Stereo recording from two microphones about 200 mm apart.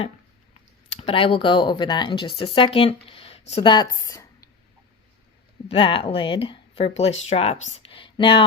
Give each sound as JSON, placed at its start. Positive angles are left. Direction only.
{"t": 0.9, "sound": "speech", "side_deg": 30}
{"t": 5.6, "sound": "speech", "side_deg": 25}